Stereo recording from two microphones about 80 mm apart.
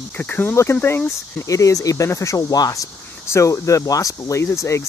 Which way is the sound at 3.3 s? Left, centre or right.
Left.